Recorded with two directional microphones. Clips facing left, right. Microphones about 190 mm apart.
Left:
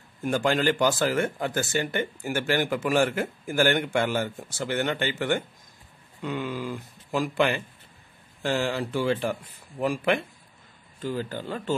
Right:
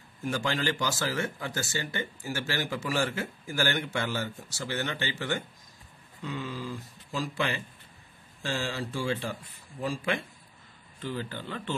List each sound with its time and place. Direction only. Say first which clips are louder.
0.3 s speech: left 6 dB; 50° left (ahead or behind)
11.0 s speech: left 5 dB; 45° left (ahead or behind)